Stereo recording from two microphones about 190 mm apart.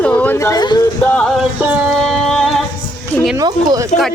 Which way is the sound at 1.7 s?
Centre (ahead or behind).